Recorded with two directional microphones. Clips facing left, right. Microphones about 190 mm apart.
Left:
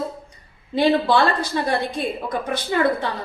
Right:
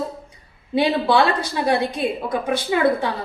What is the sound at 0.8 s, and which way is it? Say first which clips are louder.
A woman's voice: left 1 dB; 10° right (ahead or behind).